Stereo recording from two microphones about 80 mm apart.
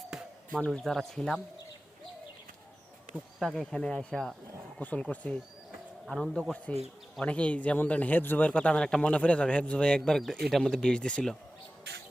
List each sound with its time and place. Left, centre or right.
0.1 s a sound: centre
0.9 s speech: centre
3.4 s speech: centre
4.8 s speech: centre
6.1 s speech: centre
6.7 s a man's voice: centre